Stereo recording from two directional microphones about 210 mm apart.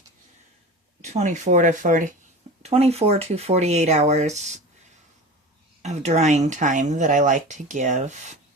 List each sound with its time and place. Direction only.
1.0 s speech: 35° right (ahead or behind)
5.8 s speech: 30° right (ahead or behind)